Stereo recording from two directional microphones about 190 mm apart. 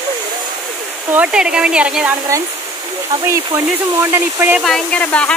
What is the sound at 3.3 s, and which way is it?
Speech, 10° right (ahead or behind).